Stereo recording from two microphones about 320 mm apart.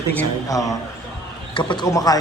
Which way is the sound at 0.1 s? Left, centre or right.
Centre.